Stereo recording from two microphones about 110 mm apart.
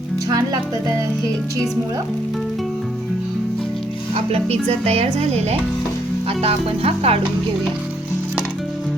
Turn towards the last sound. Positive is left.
turn(degrees=-60)  # may be behind; listen again after turning